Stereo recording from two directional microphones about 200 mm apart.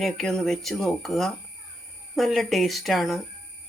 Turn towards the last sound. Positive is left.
turn(degrees=0)  # may be behind; listen again after turning